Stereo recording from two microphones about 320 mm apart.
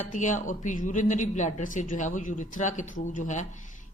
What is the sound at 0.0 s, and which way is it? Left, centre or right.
Speech, left.